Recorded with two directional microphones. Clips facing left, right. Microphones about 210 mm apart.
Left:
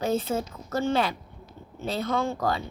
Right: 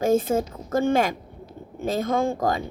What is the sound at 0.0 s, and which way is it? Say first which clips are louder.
Speech: right 6 dB; 50° right (ahead or behind).